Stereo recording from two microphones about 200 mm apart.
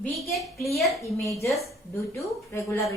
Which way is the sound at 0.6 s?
Centre (ahead or behind).